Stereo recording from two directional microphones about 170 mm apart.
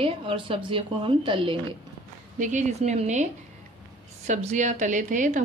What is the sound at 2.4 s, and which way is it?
A woman's voice, 45° right (ahead or behind).